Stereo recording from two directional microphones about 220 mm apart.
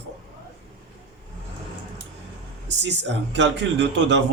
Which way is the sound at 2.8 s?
55° right (ahead or behind).